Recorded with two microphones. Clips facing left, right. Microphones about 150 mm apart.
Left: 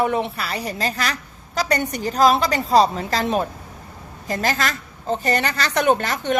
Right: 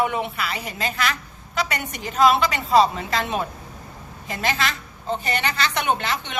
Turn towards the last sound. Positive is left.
turn(degrees=45)  # may be behind; listen again after turning